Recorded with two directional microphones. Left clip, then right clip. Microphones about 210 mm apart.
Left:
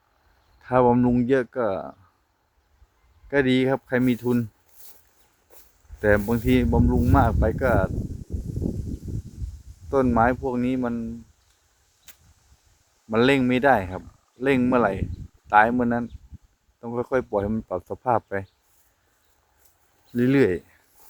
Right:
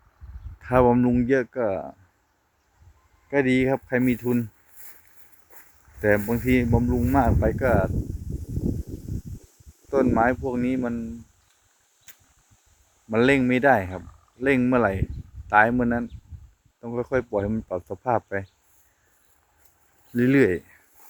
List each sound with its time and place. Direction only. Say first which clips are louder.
0.6 s speech: even; centre (ahead or behind)
3.2 s speech: left 1 dB; 10° left (ahead or behind)
6.0 s speech: left 1 dB; 10° left (ahead or behind)
9.9 s speech: left 1 dB; 10° left (ahead or behind)
12.1 s a sound: even; 5° left (ahead or behind)
13.1 s speech: even; 5° left (ahead or behind)
20.1 s speech: even; centre (ahead or behind)